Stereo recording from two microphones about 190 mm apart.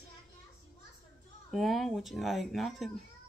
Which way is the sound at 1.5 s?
Centre (ahead or behind).